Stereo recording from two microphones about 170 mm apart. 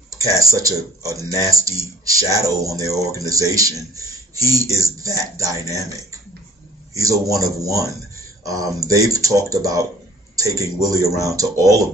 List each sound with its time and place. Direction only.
0.1 s speech: 20° right (ahead or behind)
6.9 s a man's voice: 20° right (ahead or behind)